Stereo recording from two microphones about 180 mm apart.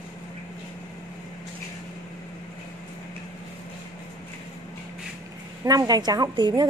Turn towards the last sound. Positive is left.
turn(degrees=-25)  # may be behind; listen again after turning